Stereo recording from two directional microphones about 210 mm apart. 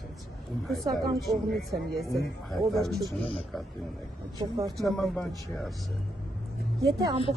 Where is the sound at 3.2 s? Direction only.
25° left (ahead or behind).